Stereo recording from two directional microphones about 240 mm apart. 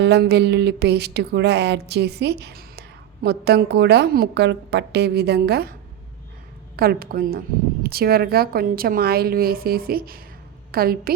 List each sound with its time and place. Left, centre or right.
0.0 s music: right
6.7 s a woman's voice: right